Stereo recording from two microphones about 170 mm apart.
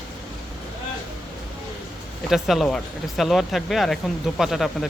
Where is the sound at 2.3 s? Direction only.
Centre (ahead or behind).